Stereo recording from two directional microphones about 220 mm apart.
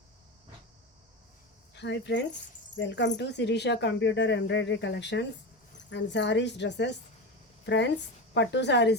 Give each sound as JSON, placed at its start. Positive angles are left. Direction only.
{"t": 1.7, "sound": "speech", "side_deg": 50}